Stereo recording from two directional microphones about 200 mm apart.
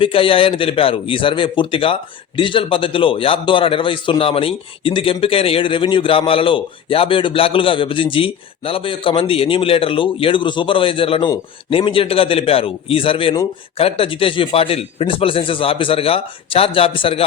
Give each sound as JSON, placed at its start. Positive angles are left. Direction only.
{"t": 0.0, "sound": "a man's voice", "side_deg": 25}